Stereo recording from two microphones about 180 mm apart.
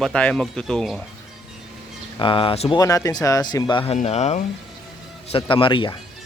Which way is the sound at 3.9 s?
40° left (ahead or behind).